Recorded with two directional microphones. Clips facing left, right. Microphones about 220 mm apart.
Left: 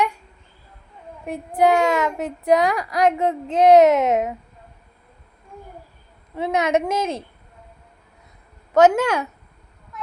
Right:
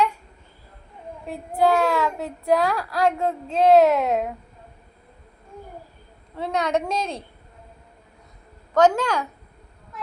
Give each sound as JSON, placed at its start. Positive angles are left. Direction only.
{"t": 1.3, "sound": "speech", "side_deg": 15}
{"t": 6.3, "sound": "speech", "side_deg": 20}
{"t": 8.7, "sound": "speech", "side_deg": 20}